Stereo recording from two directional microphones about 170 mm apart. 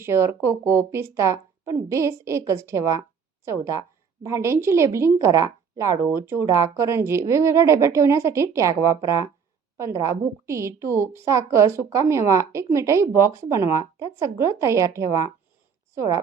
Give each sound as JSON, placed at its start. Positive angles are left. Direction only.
{"t": 0.0, "sound": "a woman's voice", "side_deg": -15}